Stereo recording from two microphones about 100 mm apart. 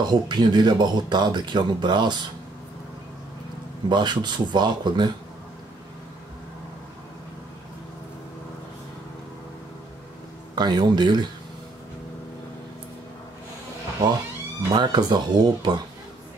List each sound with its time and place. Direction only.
0.1 s speech: 45° right (ahead or behind)
3.9 s speech: 50° right (ahead or behind)
10.5 s speech: 45° right (ahead or behind)
14.0 s speech: 40° right (ahead or behind)